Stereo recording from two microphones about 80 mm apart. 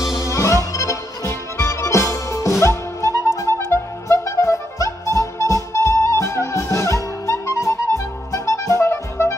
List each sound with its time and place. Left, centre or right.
0.0 s music: left